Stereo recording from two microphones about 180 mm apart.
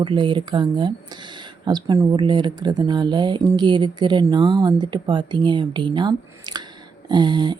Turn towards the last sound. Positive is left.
turn(degrees=-25)  # may be behind; listen again after turning